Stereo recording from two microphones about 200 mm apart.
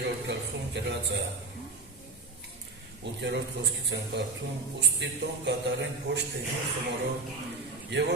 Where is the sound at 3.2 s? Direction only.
60° right (ahead or behind).